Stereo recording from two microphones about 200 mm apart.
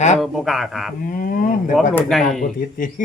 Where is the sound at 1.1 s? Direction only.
45° left (ahead or behind).